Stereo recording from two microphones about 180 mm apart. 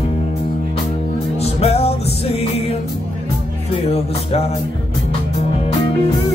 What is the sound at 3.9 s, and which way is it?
Music, 35° left (ahead or behind).